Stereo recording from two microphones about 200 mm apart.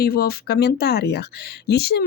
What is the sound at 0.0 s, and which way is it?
Speech, 50° left (ahead or behind).